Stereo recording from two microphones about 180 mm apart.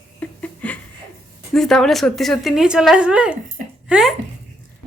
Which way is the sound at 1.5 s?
Centre (ahead or behind).